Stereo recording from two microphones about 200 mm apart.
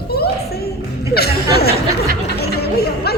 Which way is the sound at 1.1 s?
50° left (ahead or behind).